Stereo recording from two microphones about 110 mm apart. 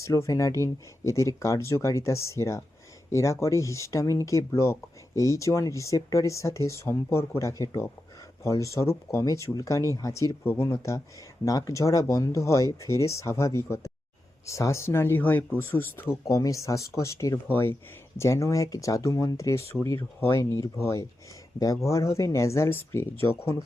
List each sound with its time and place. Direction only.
0.0 s speech: 30° left (ahead or behind)
16.2 s speech: 30° left (ahead or behind)